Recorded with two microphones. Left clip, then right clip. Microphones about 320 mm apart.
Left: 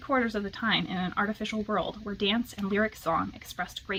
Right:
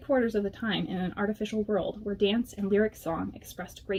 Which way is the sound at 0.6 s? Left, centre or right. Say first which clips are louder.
Left 4 dB; centre.